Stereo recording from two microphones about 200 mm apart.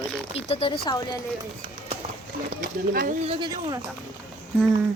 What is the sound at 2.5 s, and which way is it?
Speech, 45° right (ahead or behind).